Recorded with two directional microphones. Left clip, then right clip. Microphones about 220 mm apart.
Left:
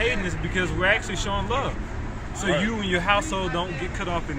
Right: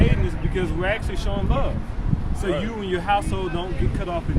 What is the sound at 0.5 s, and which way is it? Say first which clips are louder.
Speech: left 3 dB; 15° right (ahead or behind).